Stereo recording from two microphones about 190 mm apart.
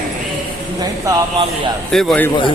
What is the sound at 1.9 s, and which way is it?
Speech, centre (ahead or behind).